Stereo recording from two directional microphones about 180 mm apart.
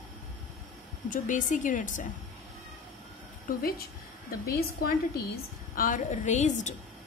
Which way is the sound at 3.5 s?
50° left (ahead or behind).